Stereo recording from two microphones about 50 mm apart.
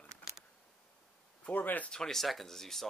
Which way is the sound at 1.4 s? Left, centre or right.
Left.